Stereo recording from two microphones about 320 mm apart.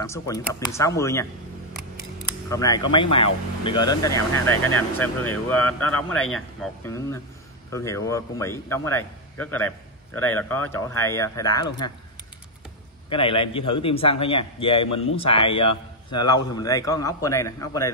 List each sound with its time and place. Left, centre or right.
0.0 s a man's voice: centre
2.5 s a man's voice: centre
13.1 s a man's voice: centre